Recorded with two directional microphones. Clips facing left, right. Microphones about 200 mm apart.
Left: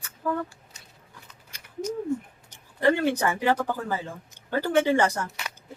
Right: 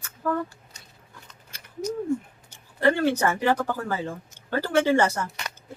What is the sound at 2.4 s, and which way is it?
Speech, 15° left (ahead or behind).